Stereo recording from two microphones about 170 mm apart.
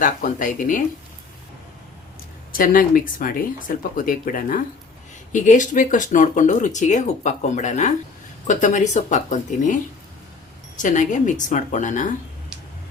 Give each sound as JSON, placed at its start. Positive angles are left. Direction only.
{"t": 0.0, "sound": "speech", "side_deg": 50}
{"t": 2.5, "sound": "speech", "side_deg": 55}
{"t": 10.8, "sound": "speech", "side_deg": 50}